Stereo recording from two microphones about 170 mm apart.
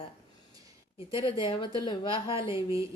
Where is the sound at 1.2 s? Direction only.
30° left (ahead or behind).